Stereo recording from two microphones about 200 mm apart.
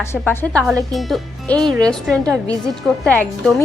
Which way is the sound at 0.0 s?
10° left (ahead or behind).